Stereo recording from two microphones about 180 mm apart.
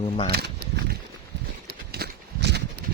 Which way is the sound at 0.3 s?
65° right (ahead or behind).